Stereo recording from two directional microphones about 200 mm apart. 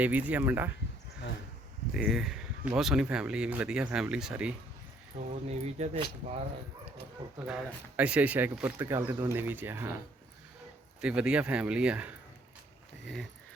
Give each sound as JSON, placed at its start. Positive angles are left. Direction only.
{"t": 0.0, "sound": "speech", "side_deg": -5}
{"t": 1.9, "sound": "speech", "side_deg": -5}
{"t": 5.1, "sound": "speech", "side_deg": -35}
{"t": 7.3, "sound": "speech", "side_deg": -5}
{"t": 11.0, "sound": "speech", "side_deg": -5}